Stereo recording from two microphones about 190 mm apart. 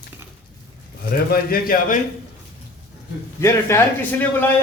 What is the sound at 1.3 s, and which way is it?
Speech, 50° left (ahead or behind).